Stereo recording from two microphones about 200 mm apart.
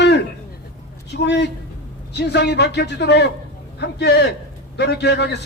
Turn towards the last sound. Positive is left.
turn(degrees=55)  # may be behind; listen again after turning